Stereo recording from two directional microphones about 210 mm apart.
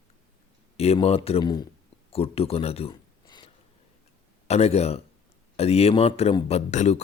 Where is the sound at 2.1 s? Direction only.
30° left (ahead or behind).